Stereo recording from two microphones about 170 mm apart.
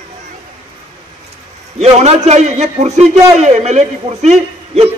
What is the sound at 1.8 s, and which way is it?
A man's voice, 40° right (ahead or behind).